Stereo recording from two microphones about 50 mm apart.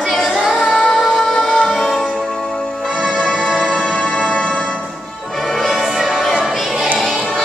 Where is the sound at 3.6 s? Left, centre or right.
Centre.